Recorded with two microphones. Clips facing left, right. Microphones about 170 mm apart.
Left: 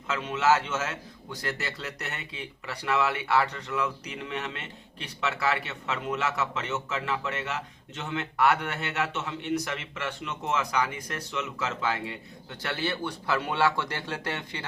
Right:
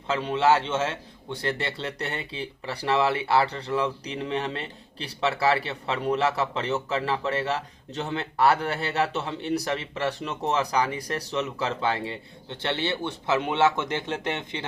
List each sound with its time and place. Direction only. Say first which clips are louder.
0.1 s speech: right 3 dB; 30° right (ahead or behind)